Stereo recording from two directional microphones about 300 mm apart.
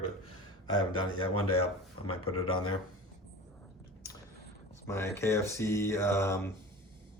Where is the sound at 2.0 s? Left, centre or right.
Left.